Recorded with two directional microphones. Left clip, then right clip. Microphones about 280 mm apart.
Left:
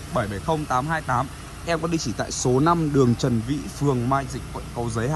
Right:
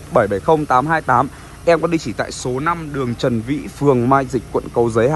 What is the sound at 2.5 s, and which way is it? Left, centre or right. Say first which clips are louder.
Speech: left 1 dB; left.